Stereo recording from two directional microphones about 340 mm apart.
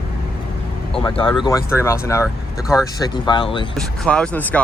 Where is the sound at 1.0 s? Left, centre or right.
Centre.